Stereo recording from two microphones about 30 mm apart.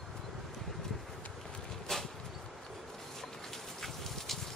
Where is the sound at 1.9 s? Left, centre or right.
Centre.